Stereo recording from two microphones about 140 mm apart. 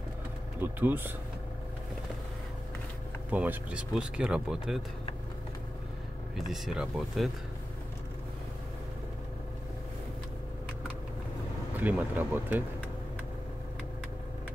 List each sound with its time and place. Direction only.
0.6 s speech: 15° right (ahead or behind)
3.3 s speech: 10° right (ahead or behind)
6.3 s speech: centre (ahead or behind)
11.7 s speech: 15° right (ahead or behind)